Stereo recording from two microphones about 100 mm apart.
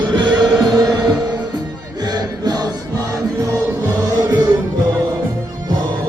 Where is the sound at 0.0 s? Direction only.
50° right (ahead or behind).